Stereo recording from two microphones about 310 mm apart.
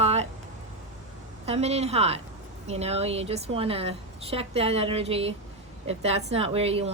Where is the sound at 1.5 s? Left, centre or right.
Right.